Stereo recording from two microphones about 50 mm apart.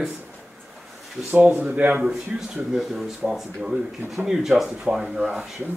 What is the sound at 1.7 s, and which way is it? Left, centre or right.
Speech, right.